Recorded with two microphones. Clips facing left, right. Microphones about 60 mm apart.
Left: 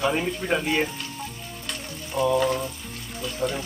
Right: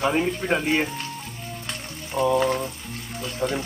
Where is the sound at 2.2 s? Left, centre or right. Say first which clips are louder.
Right 1 dB; right.